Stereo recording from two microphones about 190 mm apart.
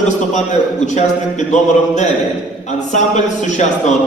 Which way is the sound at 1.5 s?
40° left (ahead or behind).